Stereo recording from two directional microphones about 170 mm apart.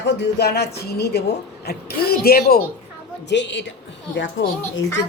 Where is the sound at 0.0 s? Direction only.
90° left; by 2.6 s 65° left (ahead or behind).